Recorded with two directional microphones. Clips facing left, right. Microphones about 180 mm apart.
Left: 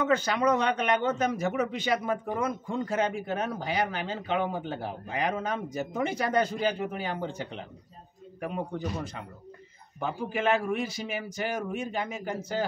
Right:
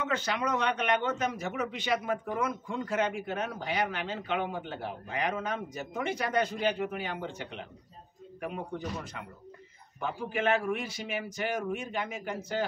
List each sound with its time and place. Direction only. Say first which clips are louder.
0.1 s a man's voice: left 6 dB; 40° left (ahead or behind)